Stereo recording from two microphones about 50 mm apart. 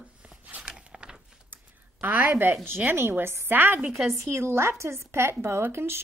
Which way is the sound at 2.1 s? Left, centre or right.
Right.